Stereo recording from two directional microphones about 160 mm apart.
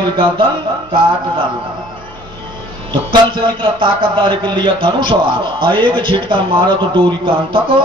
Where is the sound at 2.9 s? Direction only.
30° right (ahead or behind).